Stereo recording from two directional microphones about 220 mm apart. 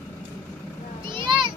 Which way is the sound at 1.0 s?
20° right (ahead or behind).